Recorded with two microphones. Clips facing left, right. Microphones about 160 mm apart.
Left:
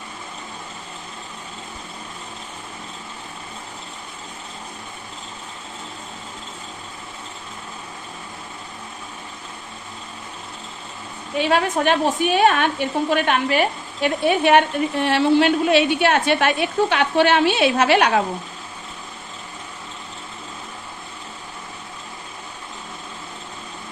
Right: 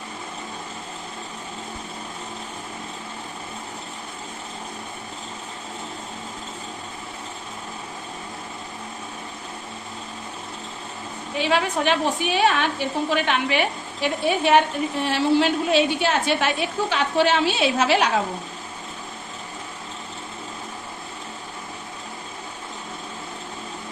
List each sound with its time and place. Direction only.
11.3 s a woman's voice: 50° left (ahead or behind)
14.3 s a woman's voice: 60° left (ahead or behind)